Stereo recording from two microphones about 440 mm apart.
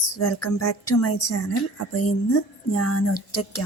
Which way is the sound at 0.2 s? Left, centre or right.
Left.